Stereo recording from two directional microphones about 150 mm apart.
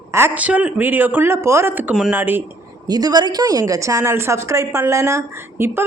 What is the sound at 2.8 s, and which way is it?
A woman's voice, 25° right (ahead or behind).